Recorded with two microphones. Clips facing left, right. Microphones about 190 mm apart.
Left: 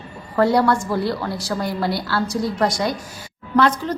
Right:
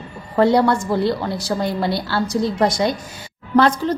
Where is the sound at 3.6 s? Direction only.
30° right (ahead or behind).